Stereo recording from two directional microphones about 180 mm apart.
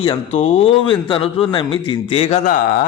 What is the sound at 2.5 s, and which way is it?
Speech, 50° left (ahead or behind).